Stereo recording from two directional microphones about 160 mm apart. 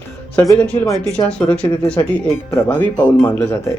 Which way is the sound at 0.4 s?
10° left (ahead or behind).